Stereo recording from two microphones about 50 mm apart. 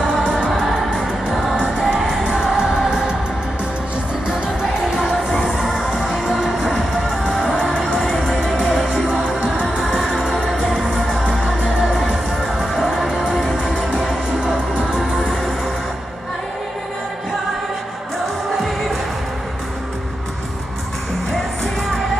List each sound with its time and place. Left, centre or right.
0.1 s music: centre
1.8 s music: centre
4.3 s music: centre
7.8 s music: centre
8.5 s music: centre